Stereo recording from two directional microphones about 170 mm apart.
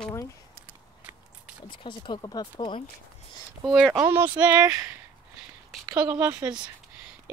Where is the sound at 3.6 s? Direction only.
Centre (ahead or behind).